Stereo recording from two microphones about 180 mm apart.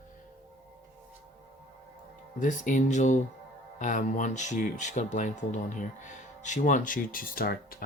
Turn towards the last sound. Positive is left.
turn(degrees=55)  # may be behind; listen again after turning